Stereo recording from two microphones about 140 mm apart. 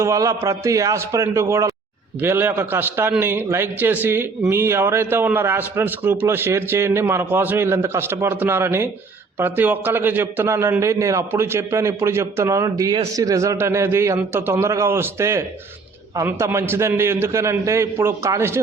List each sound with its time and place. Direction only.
0.0 s a man's voice: 20° right (ahead or behind)